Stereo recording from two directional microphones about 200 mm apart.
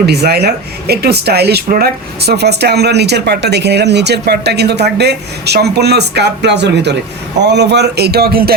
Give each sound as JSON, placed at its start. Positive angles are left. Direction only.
{"t": 0.0, "sound": "speech", "side_deg": -55}